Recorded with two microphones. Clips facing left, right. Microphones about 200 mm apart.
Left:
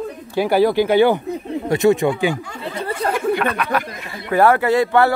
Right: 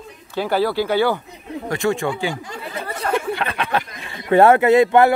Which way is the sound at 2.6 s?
30° left (ahead or behind).